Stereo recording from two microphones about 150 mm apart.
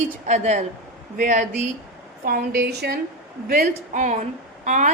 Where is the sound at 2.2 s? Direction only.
85° right.